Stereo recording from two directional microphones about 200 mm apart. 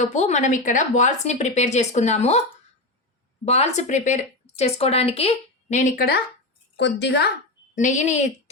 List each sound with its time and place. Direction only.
0.0 s speech: 35° left (ahead or behind)
3.4 s speech: 30° left (ahead or behind)
6.7 s a woman's voice: 60° left (ahead or behind)
7.8 s speech: 40° left (ahead or behind)